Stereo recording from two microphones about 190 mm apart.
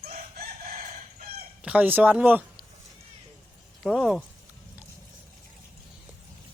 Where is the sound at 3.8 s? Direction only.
Centre (ahead or behind).